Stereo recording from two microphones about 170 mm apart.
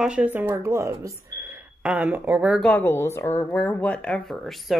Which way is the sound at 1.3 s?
15° right (ahead or behind).